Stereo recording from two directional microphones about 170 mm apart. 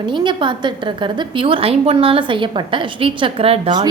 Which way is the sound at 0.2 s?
25° right (ahead or behind).